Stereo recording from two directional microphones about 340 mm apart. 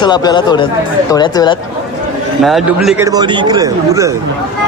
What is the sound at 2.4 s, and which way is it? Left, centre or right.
Speech, centre.